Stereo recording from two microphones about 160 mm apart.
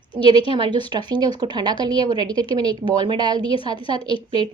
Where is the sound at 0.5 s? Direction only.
30° right (ahead or behind).